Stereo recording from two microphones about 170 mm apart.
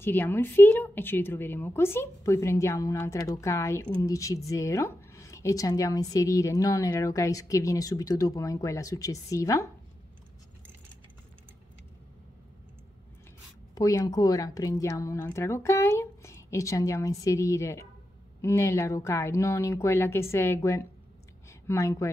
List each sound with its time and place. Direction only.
0.0 s a woman's voice: 10° left (ahead or behind)
13.7 s a woman's voice: 20° left (ahead or behind)